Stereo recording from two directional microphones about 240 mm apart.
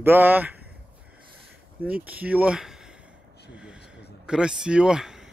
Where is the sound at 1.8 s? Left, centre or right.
Centre.